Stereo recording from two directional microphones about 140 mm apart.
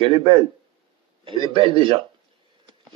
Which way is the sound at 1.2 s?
35° right (ahead or behind).